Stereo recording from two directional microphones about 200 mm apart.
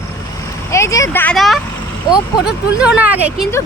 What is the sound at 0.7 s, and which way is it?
Speech, 15° left (ahead or behind).